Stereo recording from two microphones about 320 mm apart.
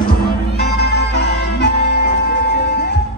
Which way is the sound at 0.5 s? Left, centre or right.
Left.